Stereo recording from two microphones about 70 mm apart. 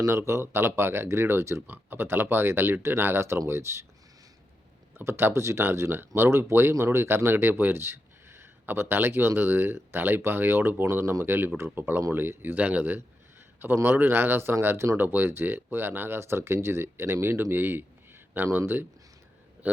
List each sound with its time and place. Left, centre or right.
0.1 s speech: right
1.6 s speech: right
4.9 s speech: right
11.0 s speech: right
11.3 s speech: right